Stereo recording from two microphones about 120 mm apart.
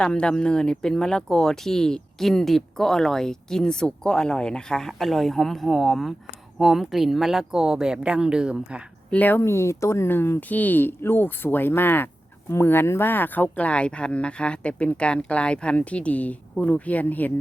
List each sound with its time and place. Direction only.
0.0 s speech: 10° left (ahead or behind); by 8.8 s 5° right (ahead or behind)
9.0 s speech: 15° left (ahead or behind)